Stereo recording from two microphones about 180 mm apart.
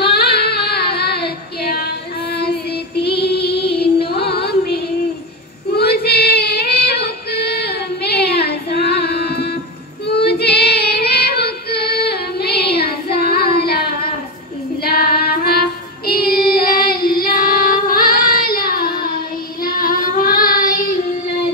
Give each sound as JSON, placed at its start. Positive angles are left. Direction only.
{"t": 0.0, "sound": "singing", "side_deg": 65}
{"t": 3.3, "sound": "child singing", "side_deg": 65}
{"t": 5.8, "sound": "female singing", "side_deg": 60}
{"t": 10.0, "sound": "child singing", "side_deg": 65}
{"t": 13.6, "sound": "a sound", "side_deg": 60}
{"t": 14.8, "sound": "child singing", "side_deg": 60}